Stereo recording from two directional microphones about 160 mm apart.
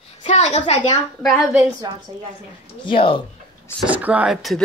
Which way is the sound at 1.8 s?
25° right (ahead or behind).